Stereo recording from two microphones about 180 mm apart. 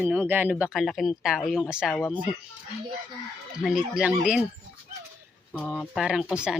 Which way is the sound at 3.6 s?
5° right (ahead or behind).